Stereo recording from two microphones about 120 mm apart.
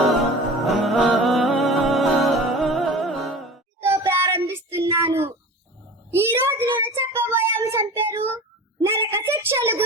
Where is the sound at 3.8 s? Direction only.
20° right (ahead or behind).